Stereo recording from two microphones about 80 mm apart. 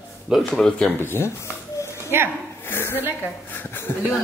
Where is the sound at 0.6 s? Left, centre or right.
Centre.